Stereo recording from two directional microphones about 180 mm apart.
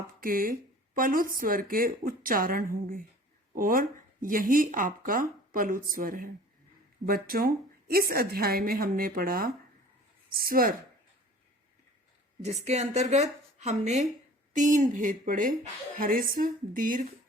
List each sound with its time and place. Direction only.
0.2 s a woman's voice: 50° right (ahead or behind)
12.4 s a woman's voice: 40° right (ahead or behind)